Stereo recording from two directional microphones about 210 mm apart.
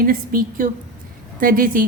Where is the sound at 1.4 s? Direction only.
40° right (ahead or behind).